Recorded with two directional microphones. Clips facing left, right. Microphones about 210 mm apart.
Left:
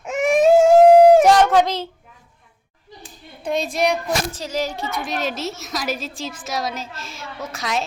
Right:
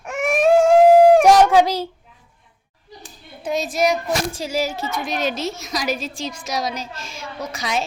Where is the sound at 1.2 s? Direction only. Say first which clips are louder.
Right 1 dB; 10° right (ahead or behind).